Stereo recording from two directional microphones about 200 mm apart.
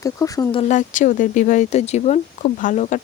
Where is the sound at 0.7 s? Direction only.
40° left (ahead or behind).